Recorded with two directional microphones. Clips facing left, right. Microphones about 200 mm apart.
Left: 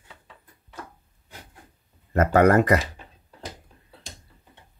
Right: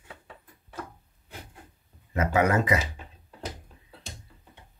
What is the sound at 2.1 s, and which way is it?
Speech, 65° left (ahead or behind).